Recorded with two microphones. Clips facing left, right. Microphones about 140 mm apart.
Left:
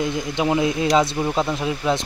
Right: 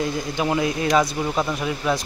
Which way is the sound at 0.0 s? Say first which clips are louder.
Left 2 dB; 20° left (ahead or behind).